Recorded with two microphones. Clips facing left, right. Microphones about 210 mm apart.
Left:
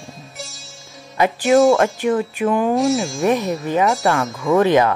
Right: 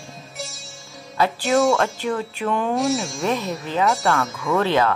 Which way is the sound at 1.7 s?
15° left (ahead or behind).